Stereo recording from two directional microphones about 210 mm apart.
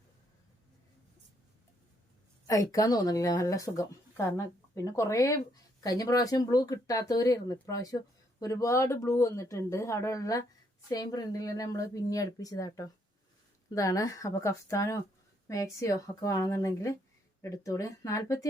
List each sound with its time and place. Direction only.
2.5 s speech: 15° left (ahead or behind)